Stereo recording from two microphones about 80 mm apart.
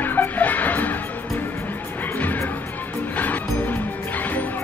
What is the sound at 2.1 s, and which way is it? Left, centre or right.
Music, left.